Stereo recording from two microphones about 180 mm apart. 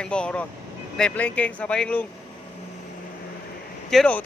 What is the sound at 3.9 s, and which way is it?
Speech, 5° left (ahead or behind).